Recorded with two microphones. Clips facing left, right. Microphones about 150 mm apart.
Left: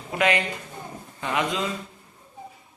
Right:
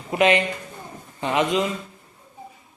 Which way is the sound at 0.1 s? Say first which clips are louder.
Right 5 dB; 20° right (ahead or behind).